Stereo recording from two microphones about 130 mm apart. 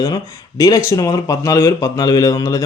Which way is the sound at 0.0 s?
30° left (ahead or behind).